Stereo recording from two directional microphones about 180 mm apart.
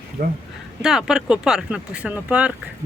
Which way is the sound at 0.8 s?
5° right (ahead or behind).